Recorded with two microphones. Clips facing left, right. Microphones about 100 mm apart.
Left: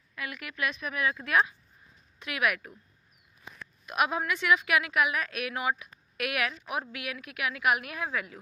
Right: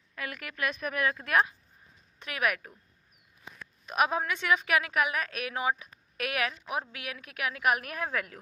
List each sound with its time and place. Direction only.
0.1 s a woman's voice: 40° right (ahead or behind)
3.9 s a woman's voice: 35° right (ahead or behind)